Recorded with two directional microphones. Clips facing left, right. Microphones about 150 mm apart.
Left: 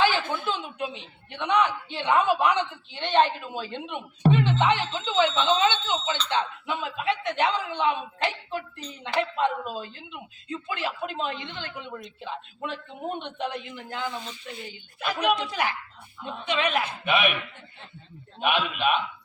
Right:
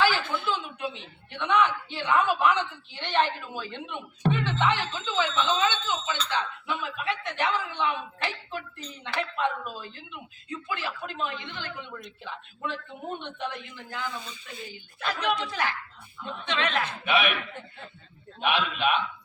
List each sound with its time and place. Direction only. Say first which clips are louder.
0.0 s a man's voice: left 1 dB; 20° left (ahead or behind)
17.1 s a man's voice: left 1 dB; centre (ahead or behind)
18.3 s a man's voice: left 1 dB; 5° left (ahead or behind)